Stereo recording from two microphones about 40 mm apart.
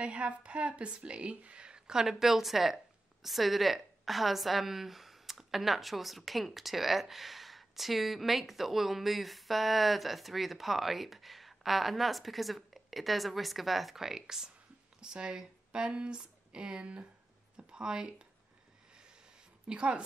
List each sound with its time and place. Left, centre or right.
0.0 s speech: right
19.7 s a woman's voice: right